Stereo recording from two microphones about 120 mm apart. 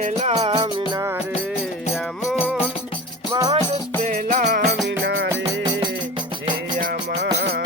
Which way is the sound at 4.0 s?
90° right.